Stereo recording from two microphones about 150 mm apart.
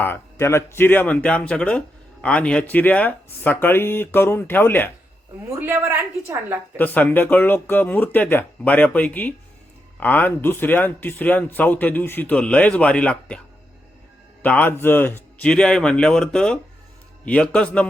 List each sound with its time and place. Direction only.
0.0 s speech: 15° left (ahead or behind)
5.5 s a woman's voice: 15° right (ahead or behind)
6.7 s speech: 10° left (ahead or behind)
14.4 s speech: 10° left (ahead or behind)